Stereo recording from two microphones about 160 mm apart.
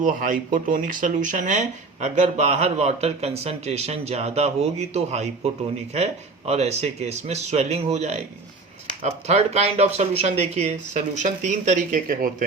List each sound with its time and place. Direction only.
0.0 s speech: 55° right (ahead or behind)